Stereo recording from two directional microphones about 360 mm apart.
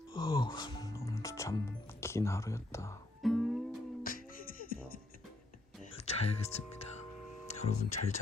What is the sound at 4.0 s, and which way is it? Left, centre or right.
Music, left.